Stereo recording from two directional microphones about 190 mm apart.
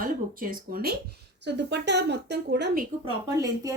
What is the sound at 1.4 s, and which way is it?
Speech, 65° right (ahead or behind).